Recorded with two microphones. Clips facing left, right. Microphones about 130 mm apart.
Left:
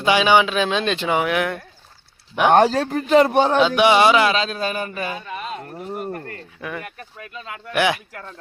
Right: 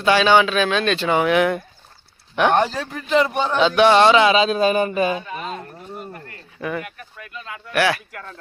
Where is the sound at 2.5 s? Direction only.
45° left (ahead or behind).